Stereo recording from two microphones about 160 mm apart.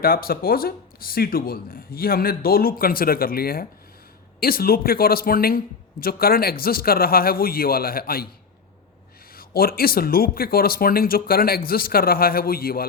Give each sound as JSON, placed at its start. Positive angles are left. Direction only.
{"t": 0.0, "sound": "speech", "side_deg": 70}
{"t": 9.3, "sound": "speech", "side_deg": 70}